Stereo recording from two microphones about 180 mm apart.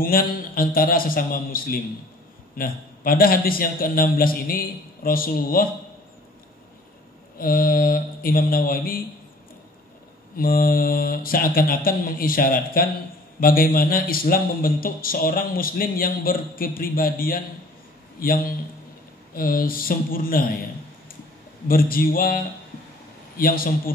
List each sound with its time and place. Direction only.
0.0 s a man's voice: 55° left (ahead or behind)
7.3 s a man's voice: 55° left (ahead or behind)
10.3 s a man's voice: 55° left (ahead or behind)
21.6 s a man's voice: 55° left (ahead or behind)